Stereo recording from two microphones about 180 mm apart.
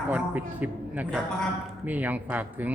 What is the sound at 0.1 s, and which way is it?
Speech, 10° right (ahead or behind).